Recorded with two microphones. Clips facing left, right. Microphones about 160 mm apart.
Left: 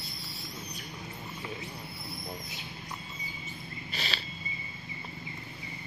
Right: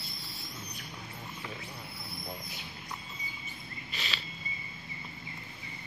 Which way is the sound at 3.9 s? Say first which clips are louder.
Left 3 dB; 35° left (ahead or behind).